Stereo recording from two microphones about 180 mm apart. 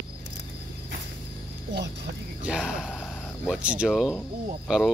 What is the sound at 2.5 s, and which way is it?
Speech, centre (ahead or behind).